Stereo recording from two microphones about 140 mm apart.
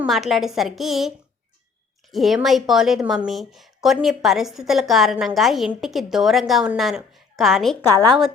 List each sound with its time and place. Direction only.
0.1 s a woman's voice: centre (ahead or behind)
2.1 s a woman's voice: centre (ahead or behind)
7.9 s a woman's voice: 30° right (ahead or behind)